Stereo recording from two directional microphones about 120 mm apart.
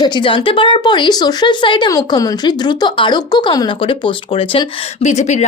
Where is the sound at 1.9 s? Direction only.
30° left (ahead or behind); by 4.9 s 50° left (ahead or behind).